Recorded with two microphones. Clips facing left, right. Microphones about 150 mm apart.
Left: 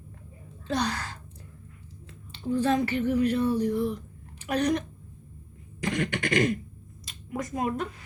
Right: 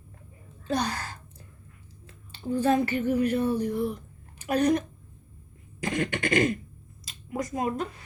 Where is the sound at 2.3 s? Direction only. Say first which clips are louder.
Right 1 dB; 45° right (ahead or behind).